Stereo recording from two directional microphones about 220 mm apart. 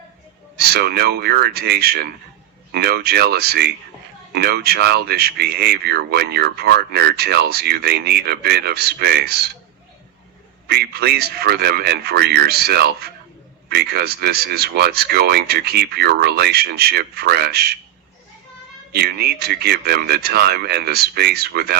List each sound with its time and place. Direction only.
0.5 s speech: 45° right (ahead or behind)
10.7 s speech: 45° right (ahead or behind)
18.9 s speech: 45° right (ahead or behind)